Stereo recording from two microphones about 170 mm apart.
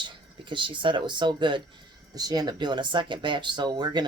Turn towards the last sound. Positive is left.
turn(degrees=-25)  # may be behind; listen again after turning